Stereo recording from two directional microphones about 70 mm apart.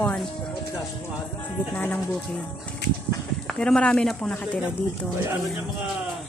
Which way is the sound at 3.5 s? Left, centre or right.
Centre.